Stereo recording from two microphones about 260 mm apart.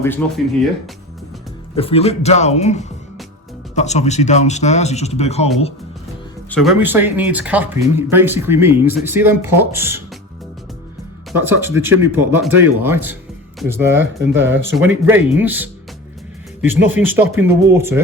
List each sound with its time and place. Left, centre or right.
0.2 s speech: centre
1.7 s speech: left
6.5 s speech: centre
11.3 s speech: centre
16.9 s speech: centre